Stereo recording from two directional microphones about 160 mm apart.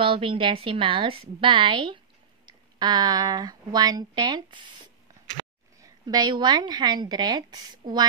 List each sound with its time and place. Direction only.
0.0 s a woman's voice: 35° right (ahead or behind)
5.8 s a woman's voice: 25° right (ahead or behind)